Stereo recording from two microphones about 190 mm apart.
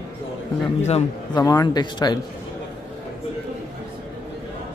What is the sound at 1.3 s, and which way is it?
Speech, 20° left (ahead or behind).